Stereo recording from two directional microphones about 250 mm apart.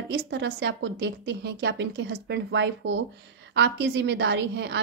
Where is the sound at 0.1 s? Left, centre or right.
Right.